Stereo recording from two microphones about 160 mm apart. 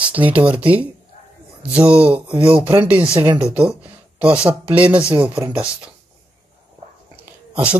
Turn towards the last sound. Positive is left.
turn(degrees=-10)  # may be behind; listen again after turning